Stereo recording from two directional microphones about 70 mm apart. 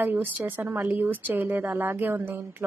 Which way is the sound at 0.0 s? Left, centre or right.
Right.